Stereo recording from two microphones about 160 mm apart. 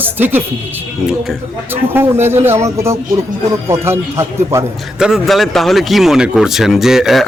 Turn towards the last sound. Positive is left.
turn(degrees=0)  # may be behind; listen again after turning